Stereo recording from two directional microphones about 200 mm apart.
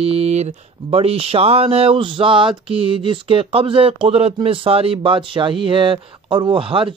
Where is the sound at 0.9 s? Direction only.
30° right (ahead or behind).